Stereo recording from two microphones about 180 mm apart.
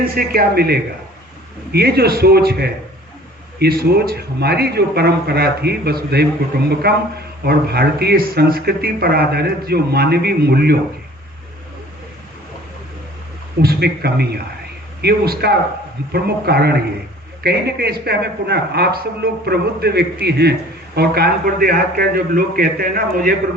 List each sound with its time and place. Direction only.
0.1 s speech: 55° right (ahead or behind)
13.6 s speech: 60° right (ahead or behind)